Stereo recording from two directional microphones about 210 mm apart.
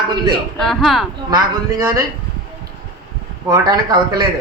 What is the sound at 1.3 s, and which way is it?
Speech, 15° right (ahead or behind).